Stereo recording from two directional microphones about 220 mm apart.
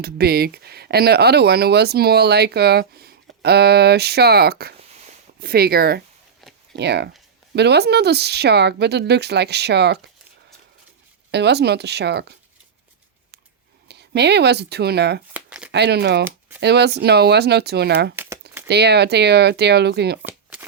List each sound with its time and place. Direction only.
0.0 s speech: 45° right (ahead or behind)
6.4 s a sound: centre (ahead or behind)
6.7 s speech: 50° right (ahead or behind)
11.3 s speech: 50° right (ahead or behind)
13.8 s speech: 50° right (ahead or behind)
15.3 s a sound: 5° right (ahead or behind)
15.7 s speech: 50° right (ahead or behind)
20.2 s shuffling cards: 10° right (ahead or behind)